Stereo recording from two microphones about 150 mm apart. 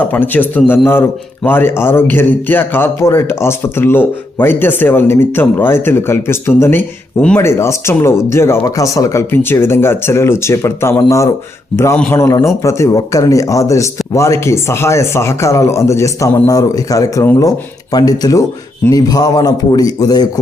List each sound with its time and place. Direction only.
0.1 s speech: 10° left (ahead or behind)
11.7 s speech: 5° left (ahead or behind)
12.1 s speech: 20° left (ahead or behind)